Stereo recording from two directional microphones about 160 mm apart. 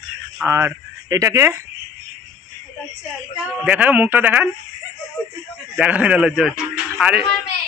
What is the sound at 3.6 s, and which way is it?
Speech, 10° right (ahead or behind).